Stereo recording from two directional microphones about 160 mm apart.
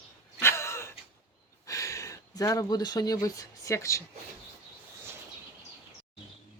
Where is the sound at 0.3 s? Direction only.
15° left (ahead or behind).